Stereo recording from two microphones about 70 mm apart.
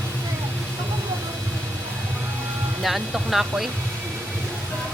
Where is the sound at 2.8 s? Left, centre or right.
Centre.